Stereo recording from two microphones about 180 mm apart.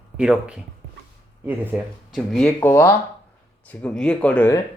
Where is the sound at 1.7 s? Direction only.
10° right (ahead or behind).